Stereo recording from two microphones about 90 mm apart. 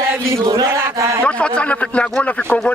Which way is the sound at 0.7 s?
35° right (ahead or behind).